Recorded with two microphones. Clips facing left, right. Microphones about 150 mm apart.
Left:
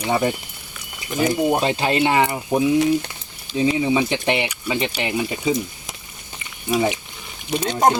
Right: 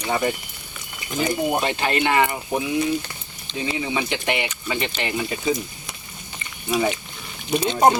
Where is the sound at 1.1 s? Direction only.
5° left (ahead or behind); by 4.5 s 25° left (ahead or behind).